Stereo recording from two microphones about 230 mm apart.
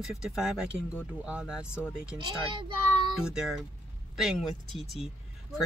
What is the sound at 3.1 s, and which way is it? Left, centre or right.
Speech, centre.